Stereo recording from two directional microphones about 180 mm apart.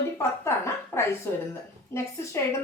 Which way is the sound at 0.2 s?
15° left (ahead or behind).